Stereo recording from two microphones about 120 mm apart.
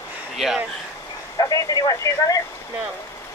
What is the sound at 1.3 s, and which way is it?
Speech, 30° left (ahead or behind).